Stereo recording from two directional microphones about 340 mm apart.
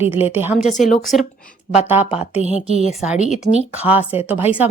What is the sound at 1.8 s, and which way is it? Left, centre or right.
Speech, centre.